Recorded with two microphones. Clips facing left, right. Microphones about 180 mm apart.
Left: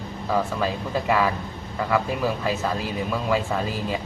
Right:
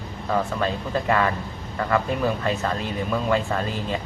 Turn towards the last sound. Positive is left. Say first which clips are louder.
# even
turn(degrees=5)  # may be behind; listen again after turning